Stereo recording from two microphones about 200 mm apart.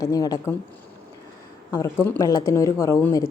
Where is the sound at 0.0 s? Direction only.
15° left (ahead or behind).